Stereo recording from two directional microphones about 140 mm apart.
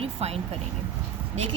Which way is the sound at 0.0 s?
45° right (ahead or behind).